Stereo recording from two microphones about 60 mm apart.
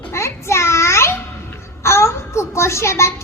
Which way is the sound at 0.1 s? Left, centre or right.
Left.